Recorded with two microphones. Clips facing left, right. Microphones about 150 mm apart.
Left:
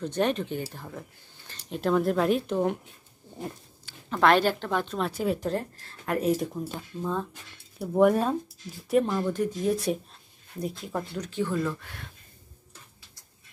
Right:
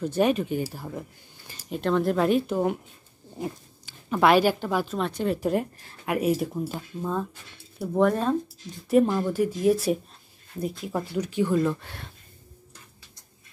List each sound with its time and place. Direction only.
0.0 s speech: 10° right (ahead or behind)
1.7 s speech: 5° left (ahead or behind)
5.4 s speech: 10° right (ahead or behind)
8.0 s speech: 10° left (ahead or behind)
8.8 s speech: 5° right (ahead or behind)
11.8 s speech: 30° right (ahead or behind)